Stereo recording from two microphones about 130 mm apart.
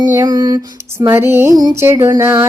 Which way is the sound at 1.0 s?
20° right (ahead or behind).